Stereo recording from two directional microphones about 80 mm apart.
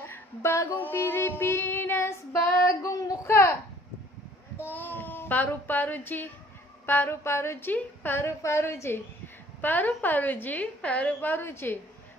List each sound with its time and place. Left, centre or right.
0.0 s female singing: left
4.6 s child singing: left
6.9 s a woman's voice: left
8.2 s female singing: left
9.6 s a woman's voice: left